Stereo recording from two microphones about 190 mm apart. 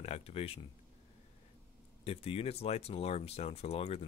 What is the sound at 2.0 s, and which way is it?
Speech, 30° left (ahead or behind).